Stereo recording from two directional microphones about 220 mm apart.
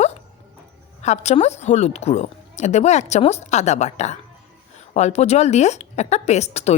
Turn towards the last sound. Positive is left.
turn(degrees=30)  # may be behind; listen again after turning